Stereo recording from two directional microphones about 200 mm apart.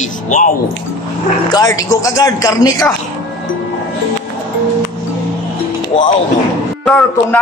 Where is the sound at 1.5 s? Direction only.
20° left (ahead or behind).